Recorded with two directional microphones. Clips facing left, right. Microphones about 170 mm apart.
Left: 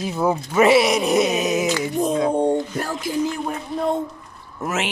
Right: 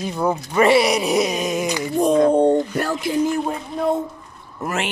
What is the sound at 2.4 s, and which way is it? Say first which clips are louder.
Speech: right 4 dB; 65° right (ahead or behind).